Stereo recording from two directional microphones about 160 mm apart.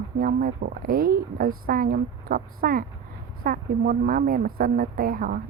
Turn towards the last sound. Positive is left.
turn(degrees=-65)  # may be behind; listen again after turning